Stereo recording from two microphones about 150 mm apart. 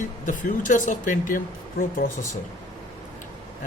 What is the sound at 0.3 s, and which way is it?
Speech, 55° left (ahead or behind).